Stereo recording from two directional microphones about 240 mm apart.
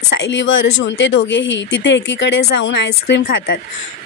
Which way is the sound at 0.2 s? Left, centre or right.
Left.